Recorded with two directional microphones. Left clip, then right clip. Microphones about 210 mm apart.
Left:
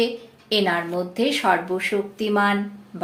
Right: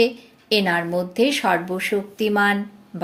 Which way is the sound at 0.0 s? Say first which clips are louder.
Right 4 dB; 45° right (ahead or behind).